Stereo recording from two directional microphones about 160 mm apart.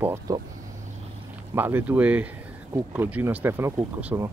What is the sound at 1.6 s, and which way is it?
Speech, 15° right (ahead or behind).